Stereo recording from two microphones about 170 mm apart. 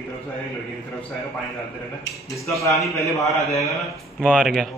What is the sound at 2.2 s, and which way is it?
Speech, 20° left (ahead or behind).